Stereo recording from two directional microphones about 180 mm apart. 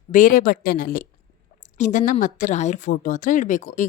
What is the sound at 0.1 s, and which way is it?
A woman's voice, 45° left (ahead or behind).